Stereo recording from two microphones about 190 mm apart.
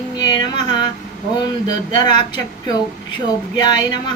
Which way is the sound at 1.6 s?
25° left (ahead or behind).